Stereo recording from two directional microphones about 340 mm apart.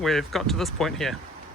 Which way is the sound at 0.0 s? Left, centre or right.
Centre.